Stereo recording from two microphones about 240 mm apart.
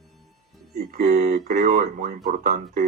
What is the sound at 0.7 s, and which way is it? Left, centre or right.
A man's voice, right.